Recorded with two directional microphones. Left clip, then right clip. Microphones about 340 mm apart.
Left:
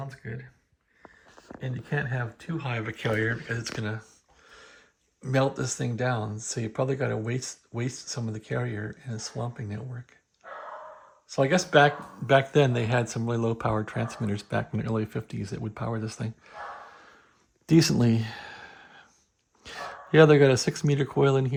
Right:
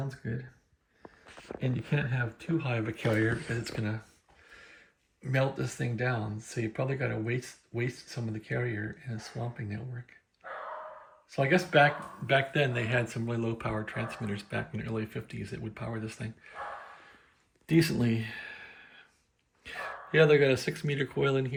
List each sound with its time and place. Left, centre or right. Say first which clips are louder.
0.0 s a sound: even; centre
1.9 s speech: left 5 dB; centre
5.2 s speech: left 5 dB; centre
11.3 s speech: left 4 dB; centre
17.7 s a sound: left 5 dB; left
19.6 s speech: left 1 dB; left